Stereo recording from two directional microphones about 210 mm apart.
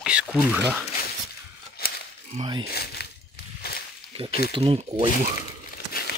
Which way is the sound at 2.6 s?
50° left (ahead or behind).